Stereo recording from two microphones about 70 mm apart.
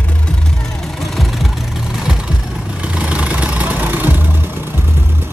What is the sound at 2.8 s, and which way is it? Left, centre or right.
Vehicle, centre.